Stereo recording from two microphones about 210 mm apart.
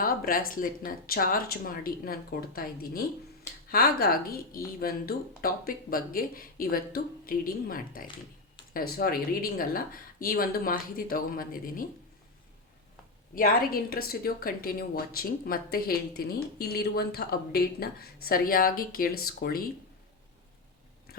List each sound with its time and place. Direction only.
0.0 s a woman's voice: 40° left (ahead or behind)
13.3 s a woman's voice: 45° left (ahead or behind)